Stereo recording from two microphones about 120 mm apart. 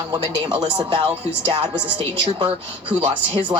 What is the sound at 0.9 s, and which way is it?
Speech, 55° right (ahead or behind).